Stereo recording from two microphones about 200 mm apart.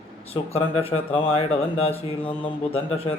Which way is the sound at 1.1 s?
30° left (ahead or behind).